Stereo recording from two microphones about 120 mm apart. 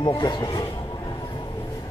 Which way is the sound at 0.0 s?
40° left (ahead or behind).